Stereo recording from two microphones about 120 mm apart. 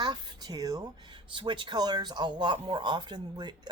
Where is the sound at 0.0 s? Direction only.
35° right (ahead or behind).